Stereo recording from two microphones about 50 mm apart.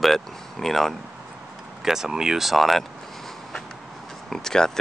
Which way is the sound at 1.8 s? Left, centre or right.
Centre.